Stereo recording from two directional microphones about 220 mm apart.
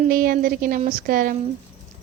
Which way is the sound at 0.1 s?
40° right (ahead or behind).